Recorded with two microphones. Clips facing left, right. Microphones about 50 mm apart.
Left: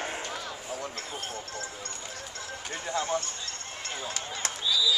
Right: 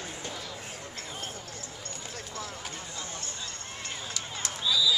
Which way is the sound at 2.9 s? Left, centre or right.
Left.